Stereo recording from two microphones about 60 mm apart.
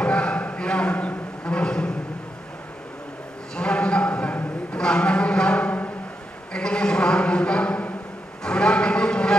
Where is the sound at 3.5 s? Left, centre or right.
Centre.